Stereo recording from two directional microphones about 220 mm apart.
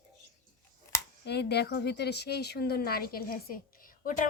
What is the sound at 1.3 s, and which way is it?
Speech, 50° left (ahead or behind).